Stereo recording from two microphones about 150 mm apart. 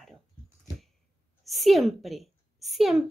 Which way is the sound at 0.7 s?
25° left (ahead or behind).